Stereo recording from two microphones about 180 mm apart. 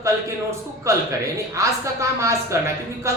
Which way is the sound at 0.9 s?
15° right (ahead or behind).